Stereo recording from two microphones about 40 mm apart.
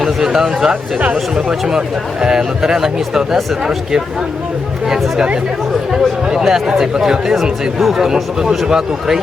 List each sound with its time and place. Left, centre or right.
0.2 s speech: centre
6.3 s speech: centre